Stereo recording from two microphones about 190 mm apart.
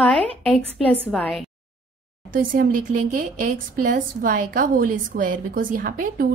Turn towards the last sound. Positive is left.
turn(degrees=-45)  # may be behind; listen again after turning